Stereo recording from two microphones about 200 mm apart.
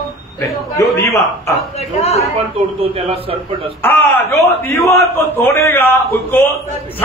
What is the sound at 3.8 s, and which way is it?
A man's voice, 15° left (ahead or behind).